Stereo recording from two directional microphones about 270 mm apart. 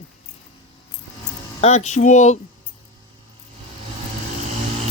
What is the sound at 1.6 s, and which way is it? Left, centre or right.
Speech, left.